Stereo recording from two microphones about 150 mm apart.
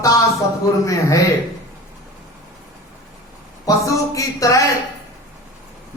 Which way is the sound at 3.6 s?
20° left (ahead or behind).